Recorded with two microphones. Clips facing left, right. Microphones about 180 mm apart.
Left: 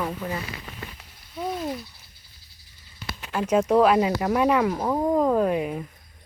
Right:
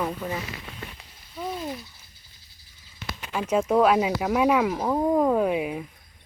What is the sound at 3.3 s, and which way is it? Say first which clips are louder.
Speech: left 2 dB; centre (ahead or behind).